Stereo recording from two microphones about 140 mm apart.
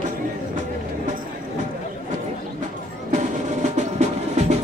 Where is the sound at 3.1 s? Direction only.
60° right (ahead or behind).